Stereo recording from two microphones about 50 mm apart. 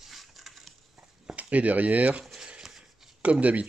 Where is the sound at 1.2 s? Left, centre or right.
Right.